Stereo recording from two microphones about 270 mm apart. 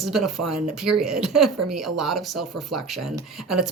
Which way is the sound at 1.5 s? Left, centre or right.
Right.